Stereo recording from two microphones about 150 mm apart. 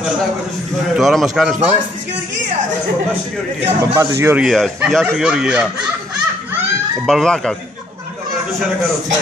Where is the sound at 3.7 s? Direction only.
20° right (ahead or behind).